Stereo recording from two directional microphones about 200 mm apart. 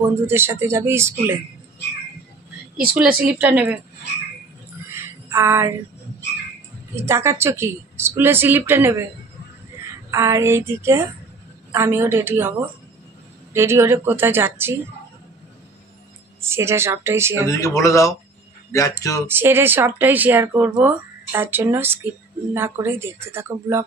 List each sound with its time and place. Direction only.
0.3 s speech: 10° right (ahead or behind)
2.9 s speech: 5° right (ahead or behind)
4.9 s a sound: 15° right (ahead or behind)
7.0 s speech: 15° right (ahead or behind)
10.1 s speech: 15° right (ahead or behind)
16.4 s speech: 10° right (ahead or behind)
17.5 s speech: 15° left (ahead or behind)
19.2 s speech: 10° right (ahead or behind)